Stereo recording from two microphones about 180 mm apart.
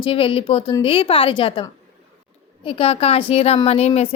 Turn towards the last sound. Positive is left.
turn(degrees=35)  # may be behind; listen again after turning